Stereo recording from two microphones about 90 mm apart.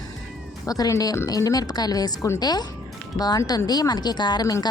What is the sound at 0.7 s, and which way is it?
Speech, 40° left (ahead or behind).